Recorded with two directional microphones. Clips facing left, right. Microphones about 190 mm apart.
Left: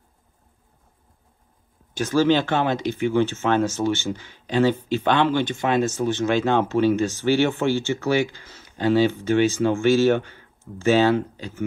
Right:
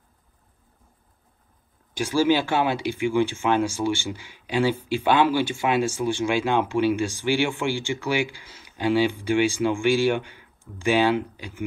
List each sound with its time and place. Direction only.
2.0 s speech: 10° right (ahead or behind)